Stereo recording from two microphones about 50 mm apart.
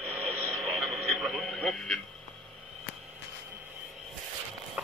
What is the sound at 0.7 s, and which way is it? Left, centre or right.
Radio, centre.